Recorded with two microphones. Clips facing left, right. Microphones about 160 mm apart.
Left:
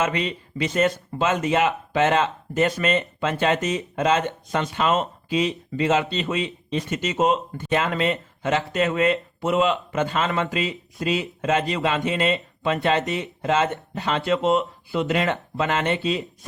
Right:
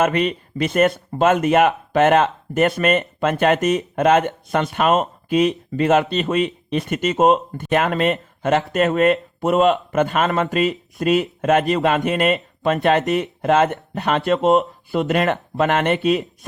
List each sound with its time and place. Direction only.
0.0 s speech: 55° right (ahead or behind)